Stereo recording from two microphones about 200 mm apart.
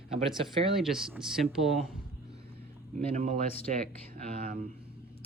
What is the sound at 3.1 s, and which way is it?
Speech, 40° right (ahead or behind).